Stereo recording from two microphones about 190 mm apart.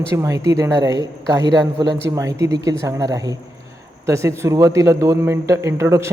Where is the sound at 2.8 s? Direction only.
20° right (ahead or behind).